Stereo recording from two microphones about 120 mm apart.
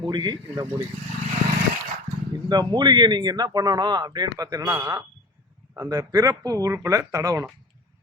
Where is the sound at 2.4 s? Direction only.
35° right (ahead or behind).